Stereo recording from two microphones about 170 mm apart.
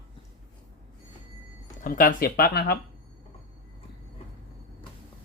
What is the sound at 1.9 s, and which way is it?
Speech, 55° left (ahead or behind).